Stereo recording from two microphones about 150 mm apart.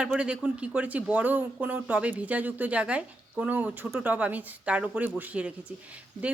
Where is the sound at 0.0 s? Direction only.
5° right (ahead or behind).